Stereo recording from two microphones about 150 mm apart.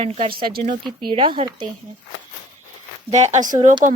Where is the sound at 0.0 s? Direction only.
40° right (ahead or behind).